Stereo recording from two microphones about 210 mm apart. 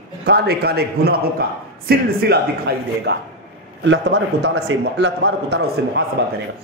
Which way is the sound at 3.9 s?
60° right (ahead or behind).